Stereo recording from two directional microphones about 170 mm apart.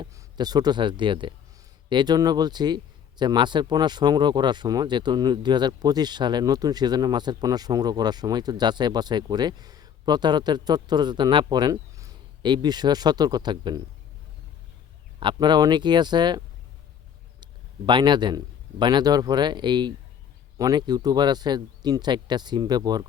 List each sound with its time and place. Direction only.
0.0 s speech: 25° right (ahead or behind)
15.2 s speech: 25° right (ahead or behind)
17.4 s a man's voice: 25° right (ahead or behind)